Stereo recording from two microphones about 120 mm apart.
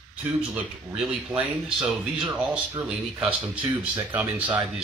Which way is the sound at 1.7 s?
5° right (ahead or behind).